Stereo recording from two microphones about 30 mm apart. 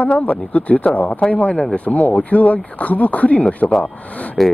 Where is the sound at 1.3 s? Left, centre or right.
Left.